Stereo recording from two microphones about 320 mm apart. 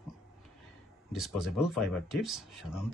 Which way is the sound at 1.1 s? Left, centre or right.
Centre.